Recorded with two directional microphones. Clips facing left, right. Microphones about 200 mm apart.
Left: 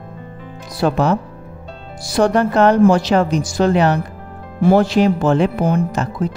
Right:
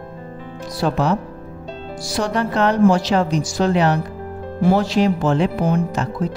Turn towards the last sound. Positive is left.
turn(degrees=55)  # may be behind; listen again after turning